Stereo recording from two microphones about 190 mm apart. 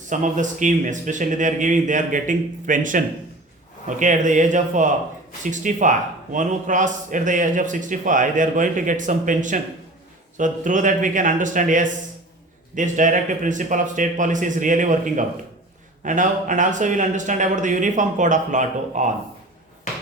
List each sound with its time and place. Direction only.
0.1 s a man's voice: 40° right (ahead or behind)